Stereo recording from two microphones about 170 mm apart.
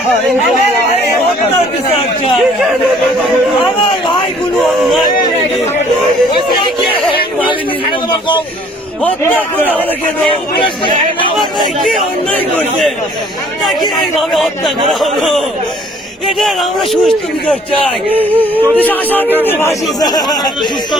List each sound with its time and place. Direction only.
2.4 s speech: centre (ahead or behind)
4.5 s speech: centre (ahead or behind)
9.0 s speech: 10° left (ahead or behind)
10.6 s speech: 30° left (ahead or behind)
11.3 s speech: centre (ahead or behind)
14.2 s speech: centre (ahead or behind)
18.2 s speech: 10° right (ahead or behind)
18.8 s speech: 10° left (ahead or behind)